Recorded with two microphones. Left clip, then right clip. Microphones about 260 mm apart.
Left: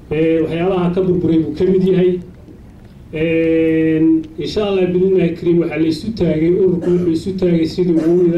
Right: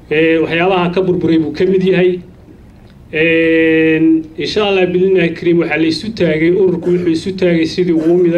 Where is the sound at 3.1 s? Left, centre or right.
Right.